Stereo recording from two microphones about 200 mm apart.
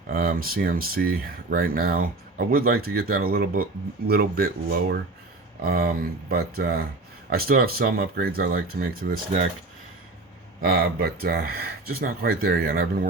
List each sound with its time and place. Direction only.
0.1 s speech: 45° right (ahead or behind)
10.6 s speech: 50° right (ahead or behind)